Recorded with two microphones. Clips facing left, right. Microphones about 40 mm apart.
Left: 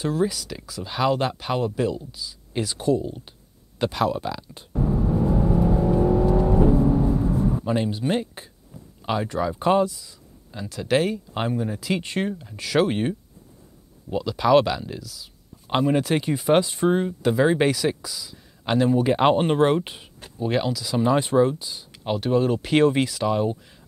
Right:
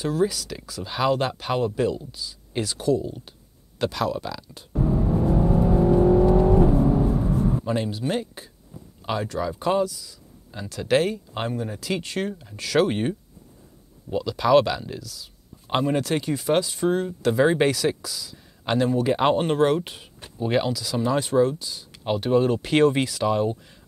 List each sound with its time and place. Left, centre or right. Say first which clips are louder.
0.2 s speech: right 1 dB; centre
4.7 s music: even; centre
5.3 s vehicle: right 2 dB; centre
7.5 s speech: left 1 dB; centre
10.5 s speech: right 1 dB; centre
12.0 s speech: left 2 dB; centre
17.3 s speech: even; centre
20.3 s speech: right 1 dB; centre
20.9 s speech: left 3 dB; centre
22.0 s speech: right 1 dB; centre